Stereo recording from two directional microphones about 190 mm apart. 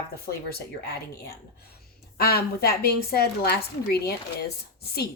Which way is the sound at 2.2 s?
55° left (ahead or behind).